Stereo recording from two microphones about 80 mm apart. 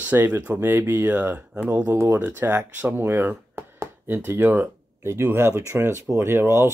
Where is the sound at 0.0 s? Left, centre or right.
Right.